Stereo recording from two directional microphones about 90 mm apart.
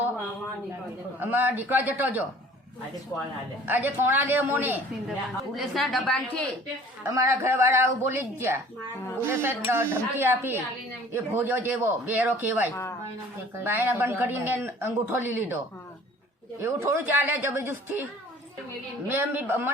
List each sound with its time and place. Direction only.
1.2 s a man's voice: 20° right (ahead or behind)
3.1 s a woman's voice: 35° left (ahead or behind)
3.7 s a man's voice: 20° right (ahead or behind)
5.5 s a woman's voice: centre (ahead or behind)
7.1 s a man's voice: 35° right (ahead or behind)
12.7 s a woman's voice: 35° left (ahead or behind)
13.7 s a man's voice: 25° right (ahead or behind)